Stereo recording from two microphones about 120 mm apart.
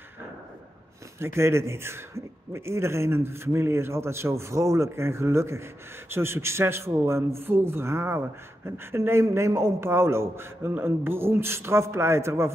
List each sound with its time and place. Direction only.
1.2 s a man's voice: 20° right (ahead or behind)